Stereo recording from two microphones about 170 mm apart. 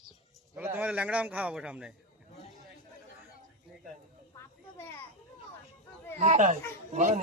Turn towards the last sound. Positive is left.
turn(degrees=-45)  # may be behind; listen again after turning